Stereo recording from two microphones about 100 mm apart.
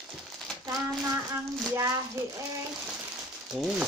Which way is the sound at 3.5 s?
5° right (ahead or behind).